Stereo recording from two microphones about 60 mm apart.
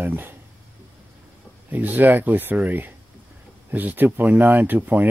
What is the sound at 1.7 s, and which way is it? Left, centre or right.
Speech, right.